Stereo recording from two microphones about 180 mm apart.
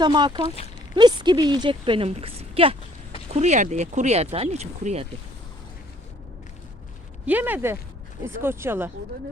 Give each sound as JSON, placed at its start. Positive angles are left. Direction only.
{"t": 0.0, "sound": "a woman's voice", "side_deg": -25}
{"t": 7.3, "sound": "speech", "side_deg": -10}